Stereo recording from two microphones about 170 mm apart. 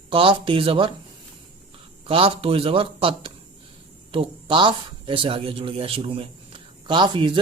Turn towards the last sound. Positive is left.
turn(degrees=-30)  # may be behind; listen again after turning